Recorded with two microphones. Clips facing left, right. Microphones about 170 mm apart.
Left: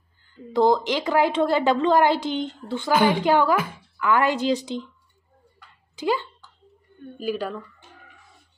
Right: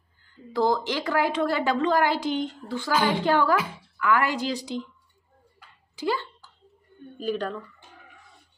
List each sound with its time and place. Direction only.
0.5 s a woman's voice: 20° left (ahead or behind)
5.9 s speech: 15° left (ahead or behind)